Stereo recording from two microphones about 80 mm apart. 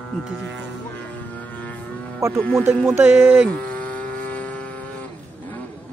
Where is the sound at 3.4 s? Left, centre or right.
Centre.